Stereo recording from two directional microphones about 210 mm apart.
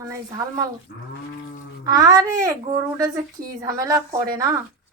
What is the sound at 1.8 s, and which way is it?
Speech, 15° right (ahead or behind).